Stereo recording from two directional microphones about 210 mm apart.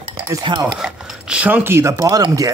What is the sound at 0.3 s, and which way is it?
Stir, 20° right (ahead or behind).